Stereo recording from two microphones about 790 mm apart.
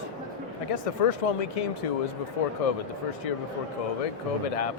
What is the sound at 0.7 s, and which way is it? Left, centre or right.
Speech, left.